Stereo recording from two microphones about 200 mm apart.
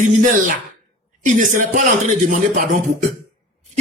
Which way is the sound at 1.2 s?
40° right (ahead or behind).